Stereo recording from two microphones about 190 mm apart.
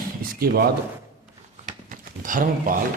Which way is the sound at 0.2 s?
50° right (ahead or behind).